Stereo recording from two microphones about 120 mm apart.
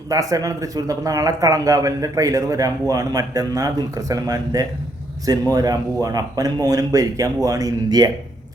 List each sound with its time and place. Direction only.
0.1 s speech: 30° right (ahead or behind)